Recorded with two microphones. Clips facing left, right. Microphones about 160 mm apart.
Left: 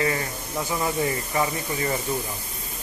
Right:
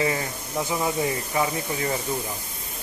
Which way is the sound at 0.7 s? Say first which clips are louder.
Even; 10° right (ahead or behind).